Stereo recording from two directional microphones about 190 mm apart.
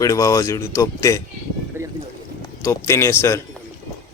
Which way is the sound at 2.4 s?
15° left (ahead or behind).